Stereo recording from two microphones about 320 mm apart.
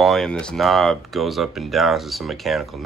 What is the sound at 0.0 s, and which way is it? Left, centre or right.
Speech, centre.